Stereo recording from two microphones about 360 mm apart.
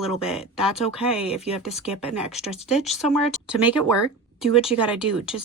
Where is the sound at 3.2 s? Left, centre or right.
Centre.